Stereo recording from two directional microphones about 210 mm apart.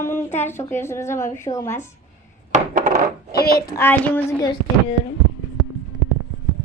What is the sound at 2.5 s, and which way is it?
Coin, 40° right (ahead or behind).